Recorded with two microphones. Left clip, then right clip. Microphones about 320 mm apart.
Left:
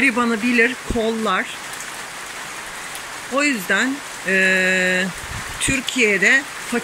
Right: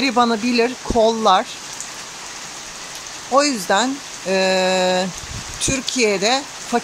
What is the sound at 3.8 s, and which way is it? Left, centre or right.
Speech, right.